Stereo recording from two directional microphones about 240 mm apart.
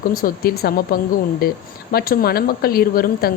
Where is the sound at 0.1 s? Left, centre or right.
Left.